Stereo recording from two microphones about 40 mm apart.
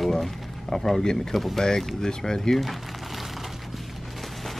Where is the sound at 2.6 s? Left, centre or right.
Centre.